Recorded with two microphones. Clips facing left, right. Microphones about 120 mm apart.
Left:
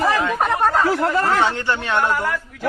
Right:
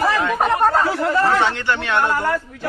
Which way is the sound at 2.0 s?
15° right (ahead or behind).